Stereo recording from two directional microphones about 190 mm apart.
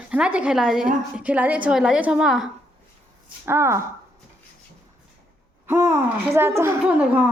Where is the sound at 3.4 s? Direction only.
15° right (ahead or behind).